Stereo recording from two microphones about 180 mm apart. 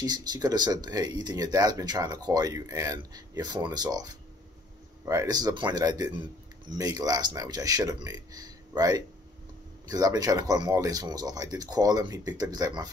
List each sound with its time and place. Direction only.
0.0 s speech: 20° right (ahead or behind)